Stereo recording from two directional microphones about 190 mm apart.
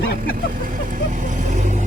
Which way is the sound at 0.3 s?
45° right (ahead or behind).